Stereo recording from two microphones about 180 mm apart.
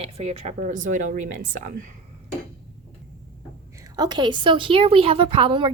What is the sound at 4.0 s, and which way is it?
Speech, 25° right (ahead or behind).